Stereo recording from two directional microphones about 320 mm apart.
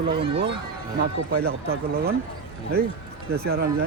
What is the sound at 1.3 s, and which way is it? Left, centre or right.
Speech, right.